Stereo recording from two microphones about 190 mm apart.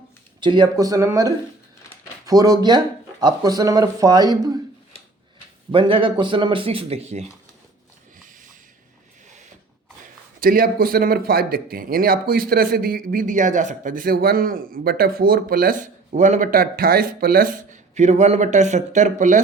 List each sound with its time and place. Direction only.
0.3 s speech: 25° right (ahead or behind)
5.7 s speech: 25° right (ahead or behind)
10.4 s speech: 50° right (ahead or behind)